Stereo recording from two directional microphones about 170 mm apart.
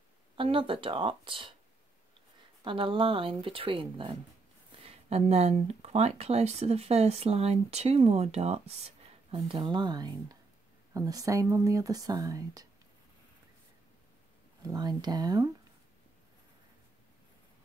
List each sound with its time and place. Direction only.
0.4 s speech: 30° right (ahead or behind)
2.6 s speech: 30° right (ahead or behind)
14.6 s speech: 20° right (ahead or behind)